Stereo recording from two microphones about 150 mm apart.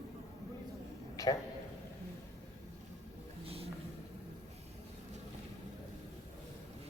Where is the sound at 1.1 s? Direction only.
25° left (ahead or behind).